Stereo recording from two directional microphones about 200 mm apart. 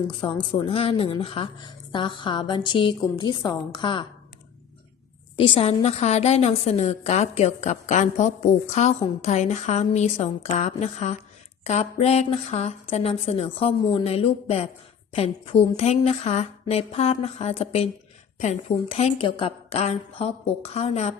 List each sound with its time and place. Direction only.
0.1 s a woman's voice: 25° left (ahead or behind)
5.4 s a woman's voice: 30° left (ahead or behind)